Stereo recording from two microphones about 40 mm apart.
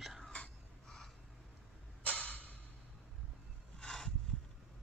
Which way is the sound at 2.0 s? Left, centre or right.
Left.